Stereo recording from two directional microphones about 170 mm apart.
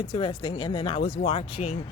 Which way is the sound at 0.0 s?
30° left (ahead or behind).